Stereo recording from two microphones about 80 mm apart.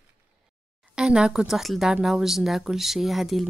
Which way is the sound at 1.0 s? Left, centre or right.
Centre.